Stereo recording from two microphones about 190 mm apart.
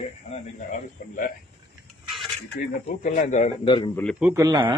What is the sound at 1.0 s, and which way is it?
Speech, 45° left (ahead or behind).